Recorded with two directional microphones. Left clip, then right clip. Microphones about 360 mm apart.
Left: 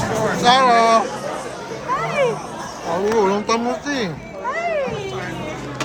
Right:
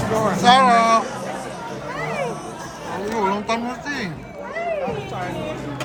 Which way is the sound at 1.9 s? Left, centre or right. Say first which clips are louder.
Left 7 dB; centre.